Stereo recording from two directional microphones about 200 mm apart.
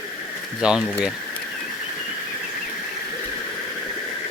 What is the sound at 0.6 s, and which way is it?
Speech, 5° right (ahead or behind).